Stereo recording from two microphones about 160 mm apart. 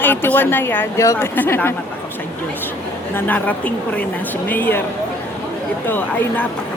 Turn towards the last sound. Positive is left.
turn(degrees=10)  # may be behind; listen again after turning